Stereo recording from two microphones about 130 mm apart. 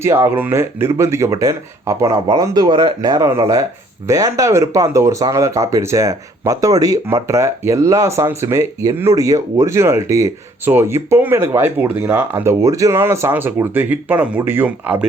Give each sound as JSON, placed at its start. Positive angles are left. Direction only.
{"t": 0.0, "sound": "speech", "side_deg": -20}